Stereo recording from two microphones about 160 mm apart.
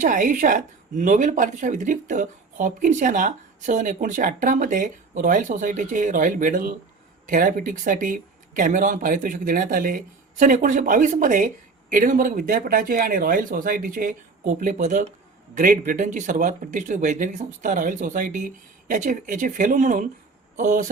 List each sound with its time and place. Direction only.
0.0 s a woman's voice: 55° right (ahead or behind)